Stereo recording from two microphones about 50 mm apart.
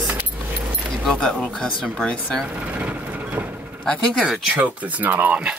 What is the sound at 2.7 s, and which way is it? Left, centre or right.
Vehicle, right.